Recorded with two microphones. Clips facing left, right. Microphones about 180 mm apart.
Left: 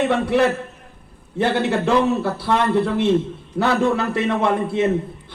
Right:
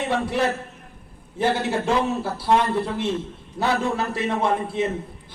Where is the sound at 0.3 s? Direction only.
65° left (ahead or behind).